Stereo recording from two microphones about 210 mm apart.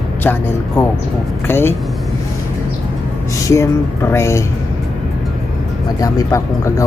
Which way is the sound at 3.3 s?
15° left (ahead or behind).